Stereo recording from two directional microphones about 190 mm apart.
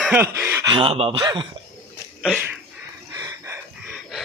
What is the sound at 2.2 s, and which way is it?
Speech, centre (ahead or behind).